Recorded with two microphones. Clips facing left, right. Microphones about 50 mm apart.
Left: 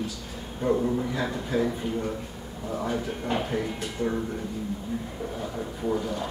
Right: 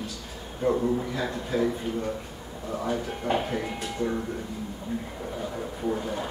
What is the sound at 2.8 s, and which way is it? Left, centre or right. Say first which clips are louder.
Speech: right 2 dB; centre.